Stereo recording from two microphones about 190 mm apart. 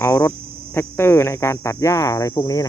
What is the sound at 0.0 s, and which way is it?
Speech, 15° left (ahead or behind).